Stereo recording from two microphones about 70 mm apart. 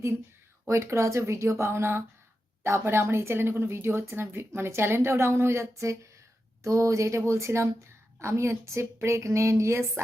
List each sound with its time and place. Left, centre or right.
0.7 s a woman's voice: right